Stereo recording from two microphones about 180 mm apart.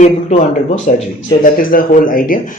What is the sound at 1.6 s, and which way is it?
Speech, 50° left (ahead or behind).